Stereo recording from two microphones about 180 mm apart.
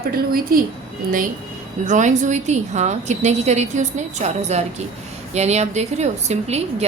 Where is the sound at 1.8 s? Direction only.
45° right (ahead or behind).